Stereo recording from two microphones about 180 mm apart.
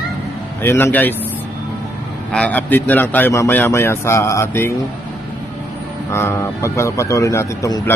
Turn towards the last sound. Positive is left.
turn(degrees=15)  # may be behind; listen again after turning